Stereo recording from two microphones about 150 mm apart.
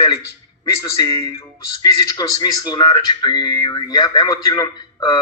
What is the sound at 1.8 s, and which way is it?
Speech, 25° left (ahead or behind).